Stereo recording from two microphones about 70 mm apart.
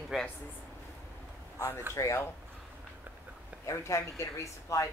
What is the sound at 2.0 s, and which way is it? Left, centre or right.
Speech, left.